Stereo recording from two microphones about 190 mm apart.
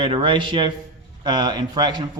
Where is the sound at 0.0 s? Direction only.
25° right (ahead or behind).